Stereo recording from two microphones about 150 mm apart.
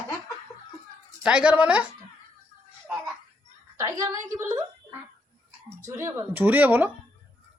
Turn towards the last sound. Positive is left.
turn(degrees=-10)  # may be behind; listen again after turning